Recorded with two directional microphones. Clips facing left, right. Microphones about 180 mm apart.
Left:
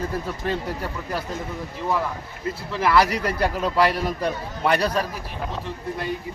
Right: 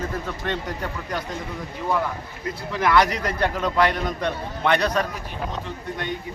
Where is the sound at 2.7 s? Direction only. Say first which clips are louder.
Even; 5° left (ahead or behind).